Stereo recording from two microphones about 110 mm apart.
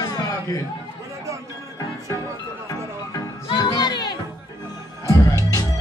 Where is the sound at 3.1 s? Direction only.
40° left (ahead or behind).